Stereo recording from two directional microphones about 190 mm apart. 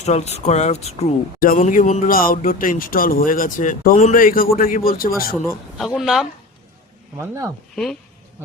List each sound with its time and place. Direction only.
0.0 s speech: 35° left (ahead or behind)
1.5 s speech: 45° left (ahead or behind)
5.7 s speech: centre (ahead or behind)
7.2 s speech: 15° right (ahead or behind)